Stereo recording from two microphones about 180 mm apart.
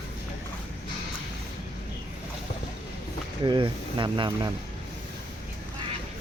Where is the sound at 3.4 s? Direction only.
25° right (ahead or behind).